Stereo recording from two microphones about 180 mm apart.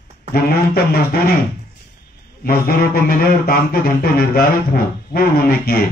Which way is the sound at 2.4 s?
55° left (ahead or behind).